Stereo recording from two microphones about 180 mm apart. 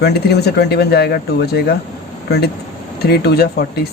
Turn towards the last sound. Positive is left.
turn(degrees=65)  # may be behind; listen again after turning